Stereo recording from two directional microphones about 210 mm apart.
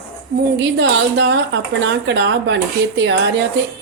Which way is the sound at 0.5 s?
55° right (ahead or behind).